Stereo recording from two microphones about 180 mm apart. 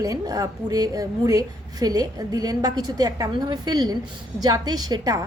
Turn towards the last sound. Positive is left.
turn(degrees=-20)  # may be behind; listen again after turning